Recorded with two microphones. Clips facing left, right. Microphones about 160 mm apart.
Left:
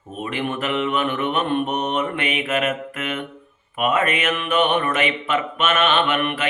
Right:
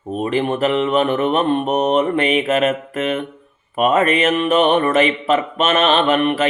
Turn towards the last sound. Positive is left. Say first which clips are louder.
# right 5 dB
turn(degrees=-35)  # may be behind; listen again after turning